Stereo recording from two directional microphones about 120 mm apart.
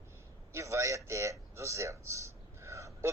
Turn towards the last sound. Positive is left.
turn(degrees=-25)  # may be behind; listen again after turning